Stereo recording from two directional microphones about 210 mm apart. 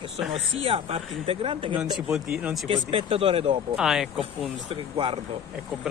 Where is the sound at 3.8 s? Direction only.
5° right (ahead or behind).